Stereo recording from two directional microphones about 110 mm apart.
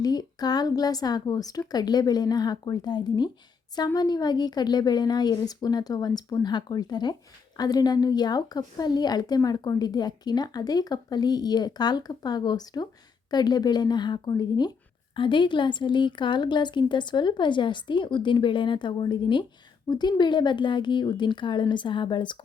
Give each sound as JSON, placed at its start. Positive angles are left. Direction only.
{"t": 0.0, "sound": "a woman's voice", "side_deg": 35}